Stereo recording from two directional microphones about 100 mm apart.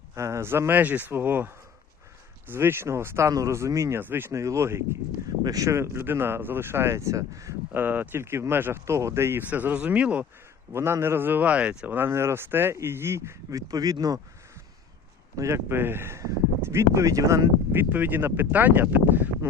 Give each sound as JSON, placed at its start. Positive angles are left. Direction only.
{"t": 0.1, "sound": "speech", "side_deg": -30}
{"t": 5.4, "sound": "speech", "side_deg": -35}
{"t": 7.7, "sound": "speech", "side_deg": -20}
{"t": 10.7, "sound": "speech", "side_deg": -25}
{"t": 11.9, "sound": "speech", "side_deg": -25}
{"t": 15.4, "sound": "speech", "side_deg": -25}